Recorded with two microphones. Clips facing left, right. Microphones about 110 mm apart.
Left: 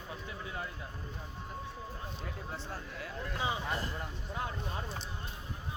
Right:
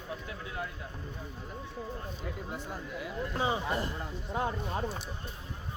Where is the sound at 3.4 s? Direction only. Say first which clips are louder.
Right 4 dB; 30° right (ahead or behind).